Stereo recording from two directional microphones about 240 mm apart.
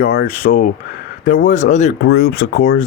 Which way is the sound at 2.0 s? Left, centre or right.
Left.